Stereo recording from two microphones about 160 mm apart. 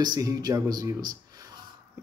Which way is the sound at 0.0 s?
25° right (ahead or behind).